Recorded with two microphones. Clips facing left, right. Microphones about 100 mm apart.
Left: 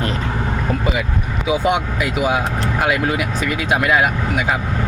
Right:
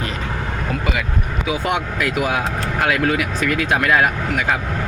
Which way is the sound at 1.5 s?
20° left (ahead or behind).